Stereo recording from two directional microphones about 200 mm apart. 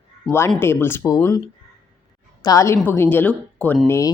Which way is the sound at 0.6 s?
10° left (ahead or behind).